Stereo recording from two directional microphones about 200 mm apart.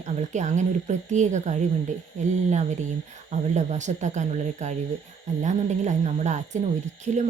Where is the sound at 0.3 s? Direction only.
35° right (ahead or behind).